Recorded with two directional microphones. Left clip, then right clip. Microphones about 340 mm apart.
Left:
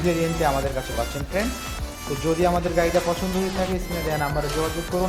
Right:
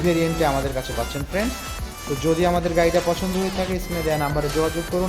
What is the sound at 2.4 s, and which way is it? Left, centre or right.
Speech, centre.